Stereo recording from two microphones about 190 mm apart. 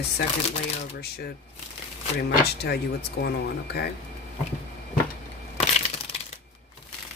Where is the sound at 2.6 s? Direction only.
60° left (ahead or behind).